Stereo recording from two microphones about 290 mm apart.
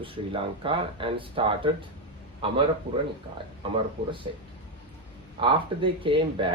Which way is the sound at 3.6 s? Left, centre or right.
Centre.